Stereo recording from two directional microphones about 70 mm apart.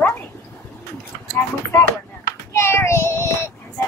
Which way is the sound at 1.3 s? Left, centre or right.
Left.